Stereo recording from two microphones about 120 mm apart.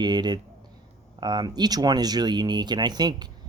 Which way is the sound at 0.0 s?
35° right (ahead or behind).